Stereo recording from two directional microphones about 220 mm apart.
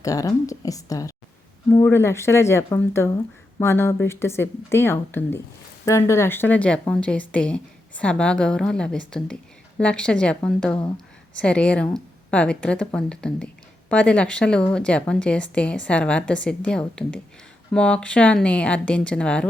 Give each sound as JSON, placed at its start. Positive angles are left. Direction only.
{"t": 0.0, "sound": "a woman's voice", "side_deg": 15}